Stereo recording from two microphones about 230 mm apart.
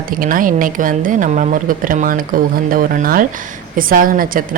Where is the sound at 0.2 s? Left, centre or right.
Right.